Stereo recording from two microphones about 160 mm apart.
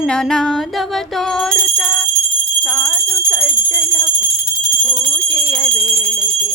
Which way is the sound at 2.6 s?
Centre (ahead or behind).